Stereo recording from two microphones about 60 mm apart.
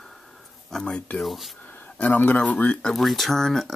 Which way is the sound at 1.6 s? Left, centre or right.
Left.